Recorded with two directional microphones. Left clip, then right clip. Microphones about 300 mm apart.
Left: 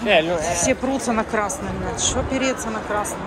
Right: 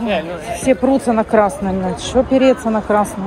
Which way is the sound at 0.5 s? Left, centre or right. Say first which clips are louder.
Right 6 dB; centre.